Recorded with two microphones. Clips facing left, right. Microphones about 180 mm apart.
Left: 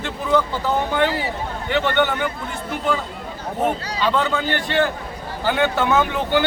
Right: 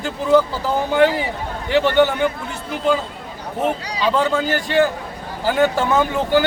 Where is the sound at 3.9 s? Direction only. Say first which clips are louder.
Right 2 dB; 10° right (ahead or behind).